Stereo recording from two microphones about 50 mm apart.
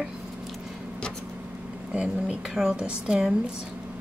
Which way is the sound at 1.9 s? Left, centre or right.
Centre.